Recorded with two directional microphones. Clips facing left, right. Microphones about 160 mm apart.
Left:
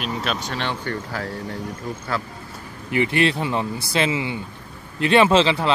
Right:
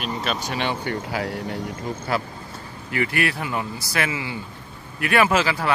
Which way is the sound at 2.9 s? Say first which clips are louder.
Left 4 dB; 20° left (ahead or behind).